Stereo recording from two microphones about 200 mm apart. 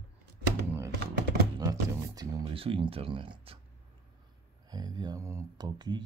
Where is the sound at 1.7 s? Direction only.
20° right (ahead or behind).